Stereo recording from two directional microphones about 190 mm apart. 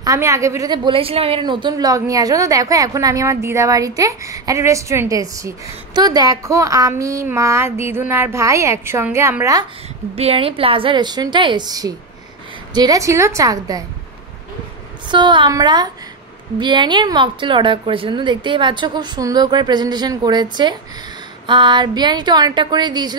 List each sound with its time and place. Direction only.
0.0 s a woman's voice: 15° right (ahead or behind)
10.1 s a woman's voice: 30° right (ahead or behind)
15.0 s a woman's voice: 25° right (ahead or behind)